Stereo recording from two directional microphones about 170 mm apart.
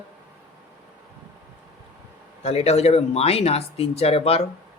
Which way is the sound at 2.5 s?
40° left (ahead or behind).